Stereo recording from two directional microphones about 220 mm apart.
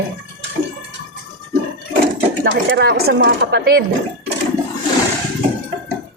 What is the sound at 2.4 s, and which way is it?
Speech, 50° right (ahead or behind).